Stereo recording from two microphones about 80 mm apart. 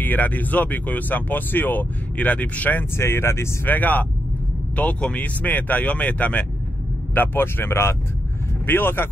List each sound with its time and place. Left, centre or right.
0.0 s speech: left